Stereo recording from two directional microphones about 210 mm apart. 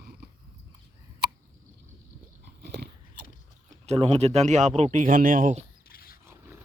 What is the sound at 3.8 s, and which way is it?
Speech, 30° right (ahead or behind).